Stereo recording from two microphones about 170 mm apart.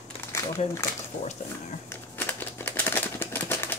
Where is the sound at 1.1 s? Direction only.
45° left (ahead or behind).